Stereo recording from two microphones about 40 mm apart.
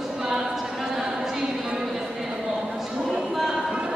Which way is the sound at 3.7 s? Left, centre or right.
Right.